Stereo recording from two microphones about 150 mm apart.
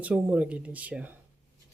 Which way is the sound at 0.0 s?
10° right (ahead or behind).